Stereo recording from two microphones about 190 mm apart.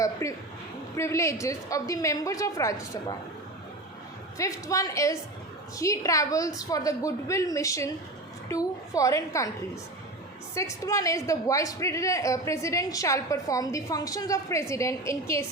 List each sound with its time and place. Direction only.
0.0 s a sound: 15° left (ahead or behind)
0.9 s a woman's voice: 15° left (ahead or behind)
4.4 s a woman's voice: 15° left (ahead or behind)
10.5 s a woman's voice: 15° left (ahead or behind)